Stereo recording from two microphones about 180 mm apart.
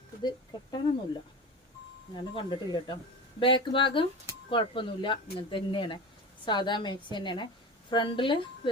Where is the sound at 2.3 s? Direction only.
25° left (ahead or behind).